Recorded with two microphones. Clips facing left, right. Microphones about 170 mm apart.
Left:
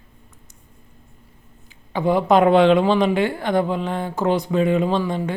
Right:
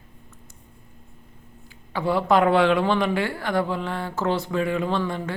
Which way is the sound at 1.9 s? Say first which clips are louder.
Left 4 dB; 20° left (ahead or behind).